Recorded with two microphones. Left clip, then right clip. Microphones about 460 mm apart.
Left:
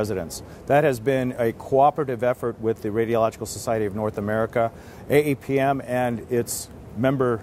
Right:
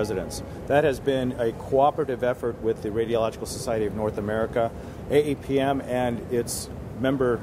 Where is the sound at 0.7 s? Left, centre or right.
Left.